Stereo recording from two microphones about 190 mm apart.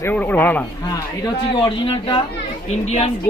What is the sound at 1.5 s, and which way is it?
Speech, 25° left (ahead or behind).